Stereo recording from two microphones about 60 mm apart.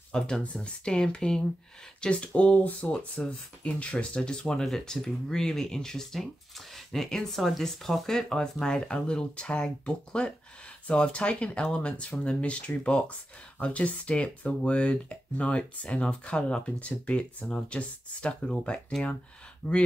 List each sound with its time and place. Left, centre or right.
0.1 s speech: centre